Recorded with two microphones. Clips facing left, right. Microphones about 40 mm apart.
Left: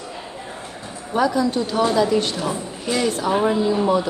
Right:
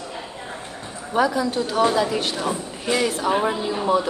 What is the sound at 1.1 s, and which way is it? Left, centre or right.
Speech, centre.